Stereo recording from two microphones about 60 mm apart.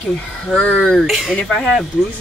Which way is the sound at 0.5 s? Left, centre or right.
Centre.